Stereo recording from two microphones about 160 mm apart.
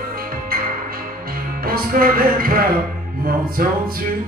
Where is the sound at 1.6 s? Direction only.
65° right (ahead or behind).